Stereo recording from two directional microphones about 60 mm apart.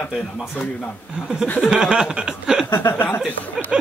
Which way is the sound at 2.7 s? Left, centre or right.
Left.